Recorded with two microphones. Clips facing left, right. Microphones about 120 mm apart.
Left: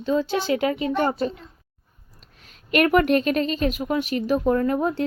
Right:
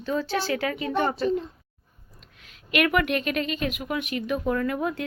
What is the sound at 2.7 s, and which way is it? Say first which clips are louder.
A woman's voice: left 5 dB; 40° left (ahead or behind).